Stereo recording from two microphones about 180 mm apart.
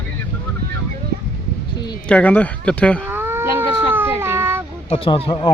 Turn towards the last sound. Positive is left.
turn(degrees=25)  # may be behind; listen again after turning